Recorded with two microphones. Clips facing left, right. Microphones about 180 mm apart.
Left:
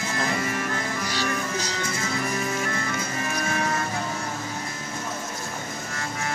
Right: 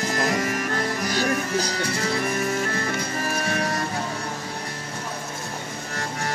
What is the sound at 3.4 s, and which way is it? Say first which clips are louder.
Vehicle: left 1 dB; 35° right (ahead or behind).